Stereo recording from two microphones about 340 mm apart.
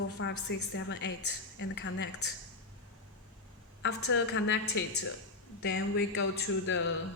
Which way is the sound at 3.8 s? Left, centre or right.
Left.